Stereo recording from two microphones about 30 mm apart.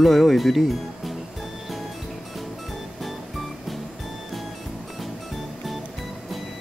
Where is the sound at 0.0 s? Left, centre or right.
Centre.